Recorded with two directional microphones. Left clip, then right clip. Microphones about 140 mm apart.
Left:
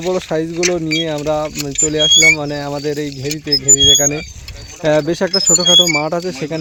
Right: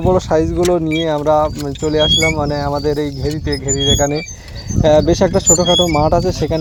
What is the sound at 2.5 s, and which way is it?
Speech, centre (ahead or behind).